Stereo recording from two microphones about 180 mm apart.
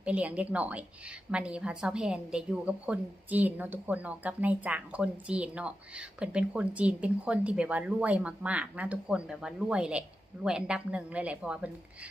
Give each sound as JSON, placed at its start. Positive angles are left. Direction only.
{"t": 0.0, "sound": "a woman's voice", "side_deg": -5}